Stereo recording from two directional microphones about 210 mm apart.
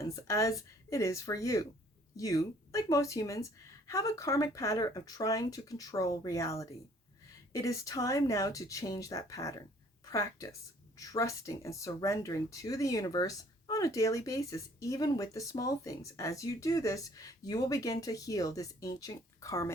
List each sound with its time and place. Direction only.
0.3 s speech: 15° left (ahead or behind)